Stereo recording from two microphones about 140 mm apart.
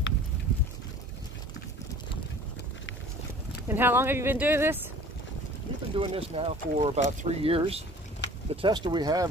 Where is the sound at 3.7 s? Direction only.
15° right (ahead or behind).